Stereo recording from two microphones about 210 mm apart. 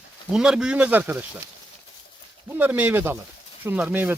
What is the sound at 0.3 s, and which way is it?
Speech, 5° right (ahead or behind).